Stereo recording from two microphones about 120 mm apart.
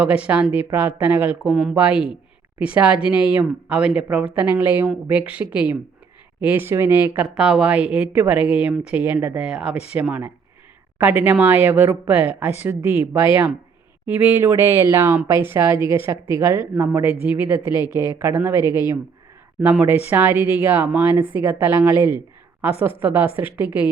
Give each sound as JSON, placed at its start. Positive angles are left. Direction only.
{"t": 0.0, "sound": "speech", "side_deg": -10}
{"t": 1.5, "sound": "speech", "side_deg": -5}
{"t": 14.1, "sound": "speech", "side_deg": -15}